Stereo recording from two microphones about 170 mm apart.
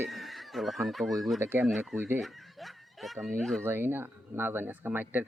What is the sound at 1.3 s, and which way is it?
Speech, 15° right (ahead or behind).